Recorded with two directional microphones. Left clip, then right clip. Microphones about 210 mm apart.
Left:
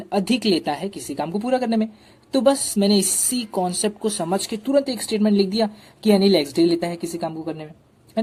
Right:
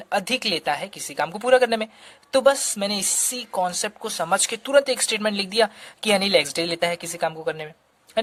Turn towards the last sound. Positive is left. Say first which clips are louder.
# right 3 dB
turn(degrees=-40)  # may be behind; listen again after turning